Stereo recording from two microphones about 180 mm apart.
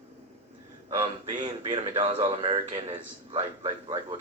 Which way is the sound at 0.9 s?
30° right (ahead or behind).